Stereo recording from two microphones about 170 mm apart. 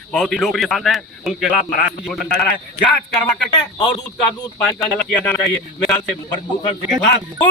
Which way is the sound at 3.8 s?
25° left (ahead or behind).